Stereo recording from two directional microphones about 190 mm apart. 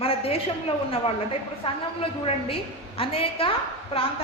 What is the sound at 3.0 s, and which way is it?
Speech, 30° left (ahead or behind).